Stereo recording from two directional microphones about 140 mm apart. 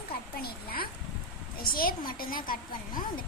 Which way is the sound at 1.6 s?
90° left.